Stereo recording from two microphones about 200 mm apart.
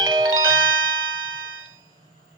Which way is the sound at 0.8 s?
80° right.